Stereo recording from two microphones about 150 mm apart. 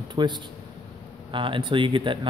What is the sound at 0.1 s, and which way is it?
A man's voice, 30° right (ahead or behind).